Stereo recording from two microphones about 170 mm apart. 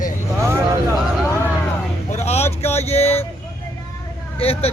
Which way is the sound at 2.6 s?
40° left (ahead or behind).